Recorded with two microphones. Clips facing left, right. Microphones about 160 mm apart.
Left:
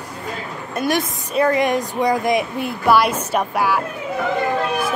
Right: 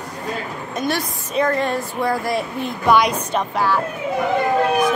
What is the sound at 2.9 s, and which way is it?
Music, 5° left (ahead or behind).